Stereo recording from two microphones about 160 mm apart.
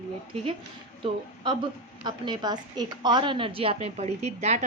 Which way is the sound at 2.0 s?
25° right (ahead or behind).